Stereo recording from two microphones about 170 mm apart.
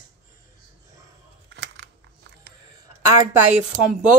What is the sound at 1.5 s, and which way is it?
Camera, 90° right.